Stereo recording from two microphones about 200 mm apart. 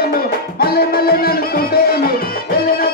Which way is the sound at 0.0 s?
50° left (ahead or behind).